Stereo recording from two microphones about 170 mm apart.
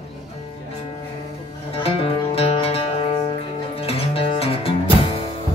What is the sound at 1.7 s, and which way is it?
Music, 35° left (ahead or behind).